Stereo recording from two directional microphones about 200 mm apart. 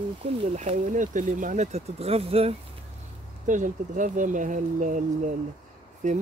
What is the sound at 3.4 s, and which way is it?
Speech, 40° right (ahead or behind).